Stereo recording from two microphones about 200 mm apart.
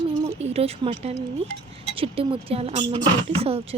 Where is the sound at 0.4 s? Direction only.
30° right (ahead or behind).